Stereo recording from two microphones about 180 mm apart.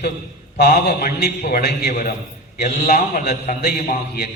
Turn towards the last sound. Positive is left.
turn(degrees=60)  # may be behind; listen again after turning